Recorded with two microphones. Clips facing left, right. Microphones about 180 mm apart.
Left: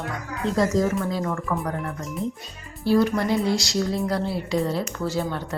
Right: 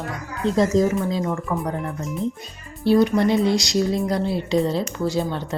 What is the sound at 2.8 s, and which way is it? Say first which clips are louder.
Speech: right 3 dB; 20° right (ahead or behind).